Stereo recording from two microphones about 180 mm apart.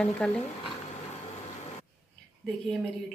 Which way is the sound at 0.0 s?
5° left (ahead or behind).